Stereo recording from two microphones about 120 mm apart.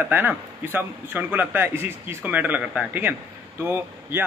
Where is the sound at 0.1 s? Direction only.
15° right (ahead or behind).